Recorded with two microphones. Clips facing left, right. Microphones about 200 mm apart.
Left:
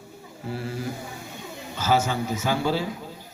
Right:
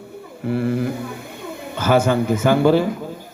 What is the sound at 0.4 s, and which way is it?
A man's voice, 60° right (ahead or behind).